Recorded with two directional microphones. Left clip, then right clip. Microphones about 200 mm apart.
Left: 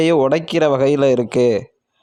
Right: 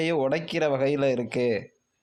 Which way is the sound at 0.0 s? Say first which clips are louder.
Left 10 dB; 45° left (ahead or behind).